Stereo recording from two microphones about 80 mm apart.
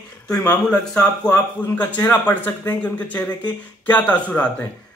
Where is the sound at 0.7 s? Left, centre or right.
Centre.